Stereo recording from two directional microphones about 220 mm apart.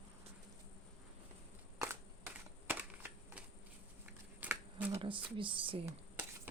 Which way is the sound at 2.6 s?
10° right (ahead or behind).